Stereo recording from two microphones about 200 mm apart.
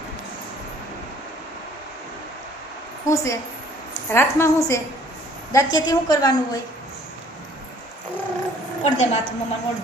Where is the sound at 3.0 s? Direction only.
15° left (ahead or behind).